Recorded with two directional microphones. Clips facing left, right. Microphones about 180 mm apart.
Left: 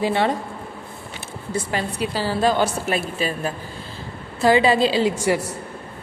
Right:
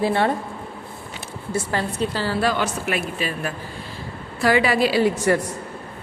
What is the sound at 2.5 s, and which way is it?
A woman's voice, 35° left (ahead or behind).